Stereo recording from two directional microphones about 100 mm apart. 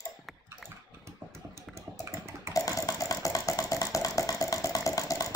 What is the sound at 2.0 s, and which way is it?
Typing, 25° right (ahead or behind).